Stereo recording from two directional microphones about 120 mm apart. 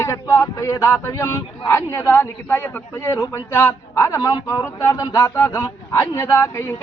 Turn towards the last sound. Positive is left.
turn(degrees=20)  # may be behind; listen again after turning